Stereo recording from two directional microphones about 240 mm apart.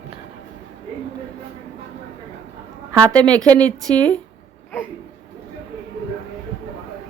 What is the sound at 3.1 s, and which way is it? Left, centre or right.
A woman's voice, centre.